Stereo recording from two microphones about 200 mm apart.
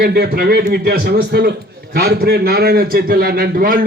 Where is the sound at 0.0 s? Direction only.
50° right (ahead or behind).